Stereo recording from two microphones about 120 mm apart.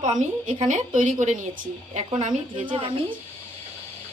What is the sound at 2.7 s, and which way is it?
Speech, 45° right (ahead or behind).